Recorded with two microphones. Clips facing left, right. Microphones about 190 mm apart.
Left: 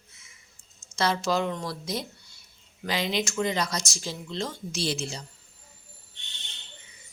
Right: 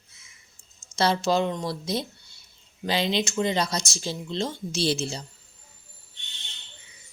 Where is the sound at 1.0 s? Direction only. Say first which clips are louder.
Right 3 dB; 25° right (ahead or behind).